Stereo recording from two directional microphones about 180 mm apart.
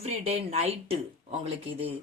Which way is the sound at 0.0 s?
35° right (ahead or behind).